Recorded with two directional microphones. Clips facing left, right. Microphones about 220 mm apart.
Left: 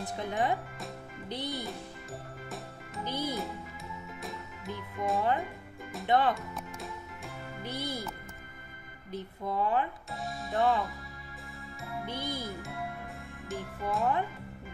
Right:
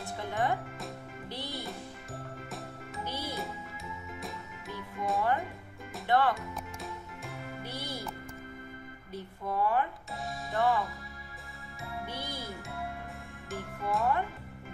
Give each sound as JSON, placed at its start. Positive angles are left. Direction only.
{"t": 0.0, "sound": "speech", "side_deg": 20}
{"t": 3.0, "sound": "music", "side_deg": 20}
{"t": 3.3, "sound": "music", "side_deg": 0}
{"t": 6.0, "sound": "speech", "side_deg": 20}
{"t": 6.3, "sound": "music", "side_deg": 0}
{"t": 7.6, "sound": "speech", "side_deg": 20}
{"t": 9.1, "sound": "speech", "side_deg": 20}
{"t": 10.2, "sound": "music", "side_deg": 0}
{"t": 12.3, "sound": "speech", "side_deg": 15}
{"t": 13.5, "sound": "speech", "side_deg": 0}